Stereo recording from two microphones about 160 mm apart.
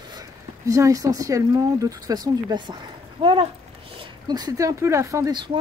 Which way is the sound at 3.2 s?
35° right (ahead or behind).